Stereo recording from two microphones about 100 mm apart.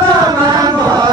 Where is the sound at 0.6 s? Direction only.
40° right (ahead or behind).